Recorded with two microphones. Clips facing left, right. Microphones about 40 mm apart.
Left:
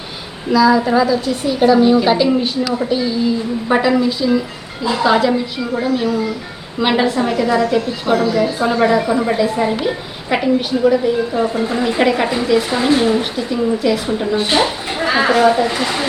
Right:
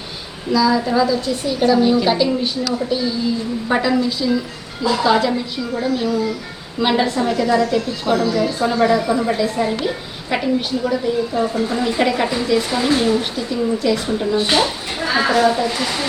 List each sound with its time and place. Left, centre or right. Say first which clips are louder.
0.5 s a woman's voice: left 4 dB; centre
1.0 s a woman's voice: left 3 dB; centre
14.5 s a sound: left 2 dB; left
15.1 s a woman's voice: left 3 dB; left